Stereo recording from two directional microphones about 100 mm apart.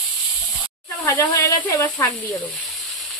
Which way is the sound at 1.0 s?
30° left (ahead or behind).